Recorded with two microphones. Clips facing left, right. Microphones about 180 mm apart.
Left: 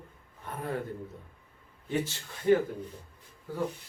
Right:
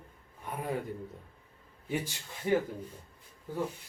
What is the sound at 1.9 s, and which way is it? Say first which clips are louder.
Speech: left 3 dB; 15° right (ahead or behind).